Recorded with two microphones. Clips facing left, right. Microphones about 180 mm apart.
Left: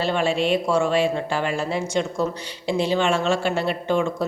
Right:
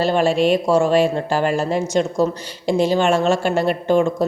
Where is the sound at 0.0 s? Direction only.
40° right (ahead or behind).